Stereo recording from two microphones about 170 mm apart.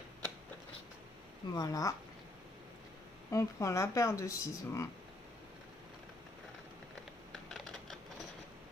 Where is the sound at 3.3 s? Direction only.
20° left (ahead or behind).